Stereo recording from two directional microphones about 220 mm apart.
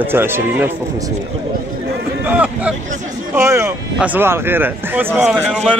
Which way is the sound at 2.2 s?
5° right (ahead or behind).